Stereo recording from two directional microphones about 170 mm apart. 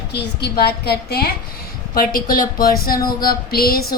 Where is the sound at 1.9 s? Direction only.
55° left (ahead or behind).